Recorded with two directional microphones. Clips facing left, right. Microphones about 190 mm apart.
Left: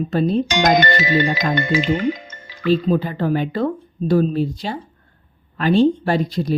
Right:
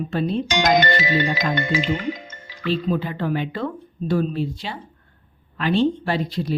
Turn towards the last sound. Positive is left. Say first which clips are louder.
# left 4 dB
turn(degrees=45)  # may be behind; listen again after turning